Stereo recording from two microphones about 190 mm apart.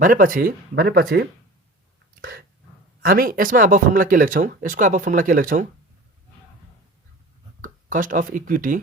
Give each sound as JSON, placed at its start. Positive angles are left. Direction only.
{"t": 0.0, "sound": "speech", "side_deg": -45}
{"t": 3.0, "sound": "speech", "side_deg": -50}
{"t": 7.6, "sound": "speech", "side_deg": -45}